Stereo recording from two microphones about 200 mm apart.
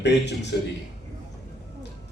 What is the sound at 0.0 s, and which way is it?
Speech, 60° left (ahead or behind).